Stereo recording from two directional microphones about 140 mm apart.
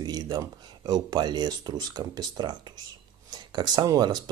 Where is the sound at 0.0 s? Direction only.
30° right (ahead or behind).